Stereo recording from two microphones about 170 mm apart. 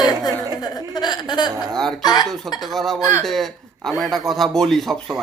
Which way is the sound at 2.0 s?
25° left (ahead or behind).